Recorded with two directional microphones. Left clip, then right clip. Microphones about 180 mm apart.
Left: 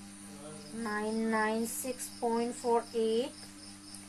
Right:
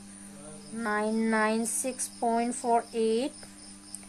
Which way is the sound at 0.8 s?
65° right (ahead or behind).